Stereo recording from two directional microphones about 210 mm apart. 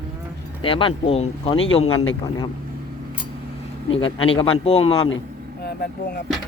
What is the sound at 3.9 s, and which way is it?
Speech, 25° left (ahead or behind).